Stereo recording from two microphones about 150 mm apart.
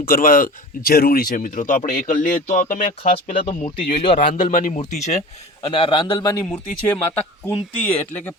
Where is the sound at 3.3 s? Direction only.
40° left (ahead or behind).